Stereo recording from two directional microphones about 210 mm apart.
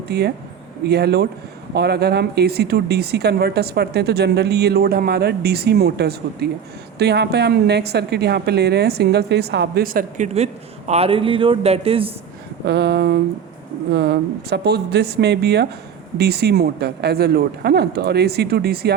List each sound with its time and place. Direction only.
0.1 s a woman's voice: 50° right (ahead or behind); by 12.1 s 25° right (ahead or behind)
12.6 s a woman's voice: 50° right (ahead or behind)